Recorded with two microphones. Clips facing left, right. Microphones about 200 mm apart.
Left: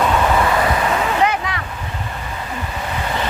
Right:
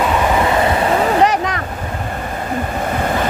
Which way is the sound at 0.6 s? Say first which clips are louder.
Right 4 dB; 35° right (ahead or behind).